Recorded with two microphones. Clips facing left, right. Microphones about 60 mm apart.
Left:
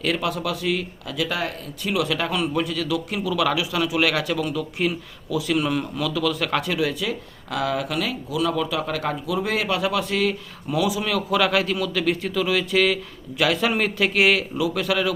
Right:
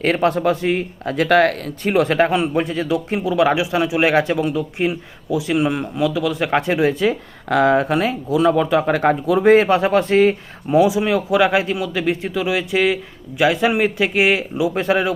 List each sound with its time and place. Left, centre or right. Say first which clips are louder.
0.0 s speech: right 8 dB; right
1.8 s speech: right 8 dB; right